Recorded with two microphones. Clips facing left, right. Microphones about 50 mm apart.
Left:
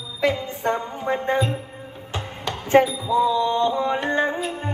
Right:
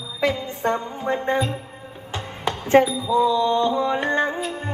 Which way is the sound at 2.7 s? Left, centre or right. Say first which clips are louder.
Even; centre.